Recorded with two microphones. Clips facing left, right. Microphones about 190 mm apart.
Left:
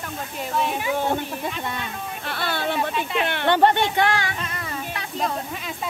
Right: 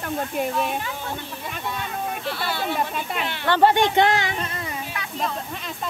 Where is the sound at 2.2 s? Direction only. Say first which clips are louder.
Left 4 dB; 55° left (ahead or behind).